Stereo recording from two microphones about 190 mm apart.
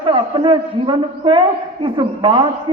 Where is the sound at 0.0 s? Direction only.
25° right (ahead or behind).